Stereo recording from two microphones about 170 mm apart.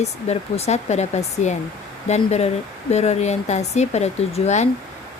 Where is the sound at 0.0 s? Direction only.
40° left (ahead or behind).